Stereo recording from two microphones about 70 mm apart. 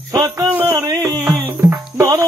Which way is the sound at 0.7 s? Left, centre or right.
Right.